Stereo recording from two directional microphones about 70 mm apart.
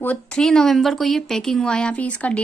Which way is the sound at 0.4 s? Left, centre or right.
Centre.